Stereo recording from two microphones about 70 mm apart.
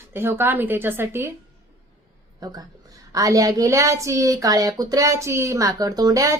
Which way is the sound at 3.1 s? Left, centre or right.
Right.